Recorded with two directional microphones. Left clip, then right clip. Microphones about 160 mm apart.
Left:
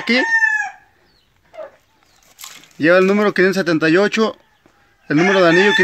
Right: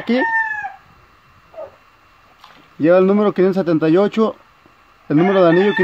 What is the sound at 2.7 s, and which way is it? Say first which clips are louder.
Speech: even; centre (ahead or behind).